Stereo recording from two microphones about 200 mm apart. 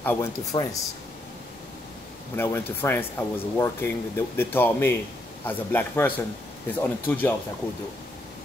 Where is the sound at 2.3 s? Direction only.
10° left (ahead or behind).